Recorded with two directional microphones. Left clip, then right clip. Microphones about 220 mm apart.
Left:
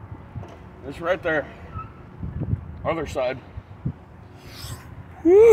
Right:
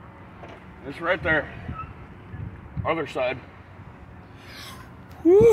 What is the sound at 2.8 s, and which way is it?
Speech, 40° left (ahead or behind).